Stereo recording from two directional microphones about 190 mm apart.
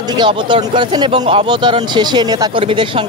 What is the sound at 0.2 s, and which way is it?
Speech, 25° right (ahead or behind).